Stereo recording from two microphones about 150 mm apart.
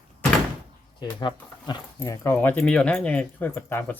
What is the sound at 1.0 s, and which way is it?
Speech, 30° left (ahead or behind).